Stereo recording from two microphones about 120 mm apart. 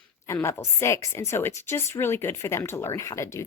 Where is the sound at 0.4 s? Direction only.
20° left (ahead or behind).